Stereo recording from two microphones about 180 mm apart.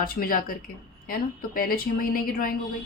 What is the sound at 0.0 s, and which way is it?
A woman's voice, 50° left (ahead or behind).